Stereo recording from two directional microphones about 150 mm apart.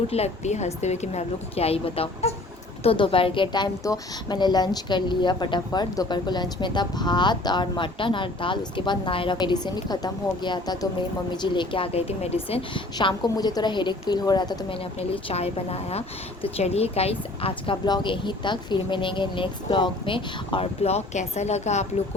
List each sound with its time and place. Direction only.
0.1 s a woman's voice: 45° left (ahead or behind)